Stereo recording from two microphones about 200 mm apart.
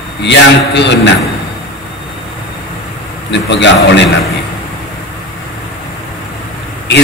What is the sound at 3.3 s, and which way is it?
Speech, 60° left (ahead or behind).